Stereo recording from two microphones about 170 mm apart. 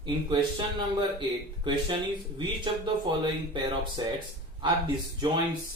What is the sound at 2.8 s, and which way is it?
Speech, 30° right (ahead or behind).